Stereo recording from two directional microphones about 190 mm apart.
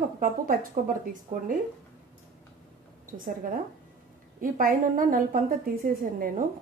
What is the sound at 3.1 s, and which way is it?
A woman's voice, 45° right (ahead or behind).